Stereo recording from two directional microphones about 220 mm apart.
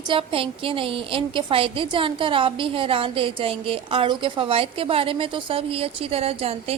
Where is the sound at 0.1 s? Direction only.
25° right (ahead or behind).